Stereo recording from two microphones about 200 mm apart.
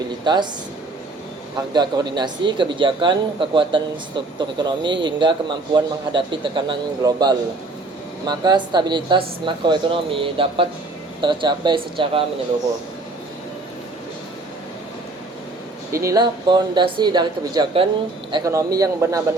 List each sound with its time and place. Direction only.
0.3 s a man's voice: 20° right (ahead or behind)
1.7 s a man's voice: 20° right (ahead or behind)
15.9 s a man's voice: 15° right (ahead or behind)